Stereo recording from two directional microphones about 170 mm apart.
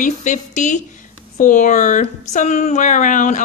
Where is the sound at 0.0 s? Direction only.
45° left (ahead or behind).